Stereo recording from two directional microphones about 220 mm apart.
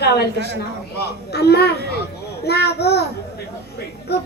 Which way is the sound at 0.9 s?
45° left (ahead or behind).